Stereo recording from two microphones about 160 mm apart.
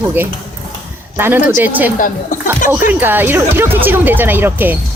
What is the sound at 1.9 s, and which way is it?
Speech, 55° left (ahead or behind).